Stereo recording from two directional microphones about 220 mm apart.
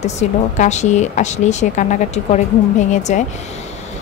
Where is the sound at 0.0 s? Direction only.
30° left (ahead or behind).